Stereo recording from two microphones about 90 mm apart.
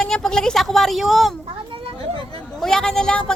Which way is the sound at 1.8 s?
90° right.